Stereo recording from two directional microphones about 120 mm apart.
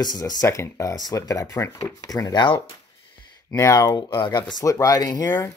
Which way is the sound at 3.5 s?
30° left (ahead or behind).